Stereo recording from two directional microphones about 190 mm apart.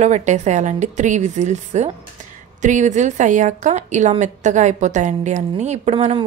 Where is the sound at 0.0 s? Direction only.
40° right (ahead or behind).